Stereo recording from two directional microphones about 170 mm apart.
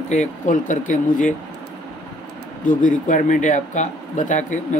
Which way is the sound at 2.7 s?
50° left (ahead or behind).